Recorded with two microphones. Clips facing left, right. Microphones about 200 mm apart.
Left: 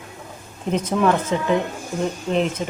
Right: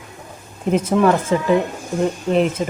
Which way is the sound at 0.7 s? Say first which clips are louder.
Right 4 dB; 5° right (ahead or behind).